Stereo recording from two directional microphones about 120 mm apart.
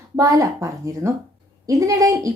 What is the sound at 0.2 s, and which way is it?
Speech, 25° right (ahead or behind).